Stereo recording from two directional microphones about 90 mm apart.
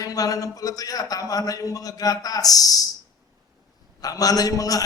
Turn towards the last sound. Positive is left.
turn(degrees=40)  # may be behind; listen again after turning